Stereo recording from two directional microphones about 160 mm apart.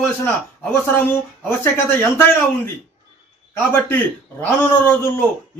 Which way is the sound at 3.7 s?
15° left (ahead or behind).